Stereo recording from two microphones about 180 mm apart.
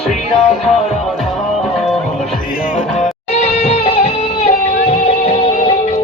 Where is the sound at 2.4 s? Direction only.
45° left (ahead or behind).